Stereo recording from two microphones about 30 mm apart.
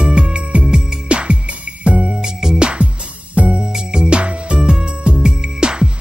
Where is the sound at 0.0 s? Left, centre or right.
Right.